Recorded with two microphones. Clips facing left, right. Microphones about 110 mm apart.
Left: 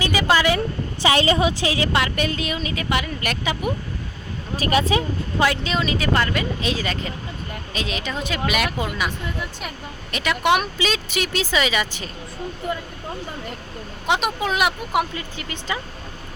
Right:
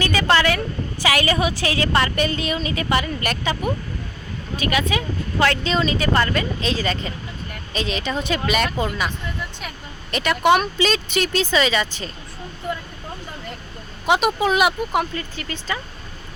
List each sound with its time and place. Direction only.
0.0 s a sound: 10° left (ahead or behind)
1.0 s a woman's voice: 25° left (ahead or behind)
2.0 s speech: 5° left (ahead or behind)
4.5 s speech: 35° left (ahead or behind)
5.4 s speech: 10° left (ahead or behind)
14.1 s speech: centre (ahead or behind)
14.9 s speech: 15° left (ahead or behind)